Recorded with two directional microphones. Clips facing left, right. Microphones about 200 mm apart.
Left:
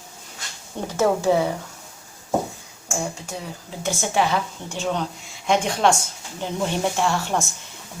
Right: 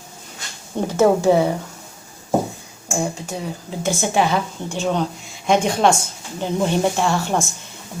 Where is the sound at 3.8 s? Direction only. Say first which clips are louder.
Right 3 dB; 20° right (ahead or behind).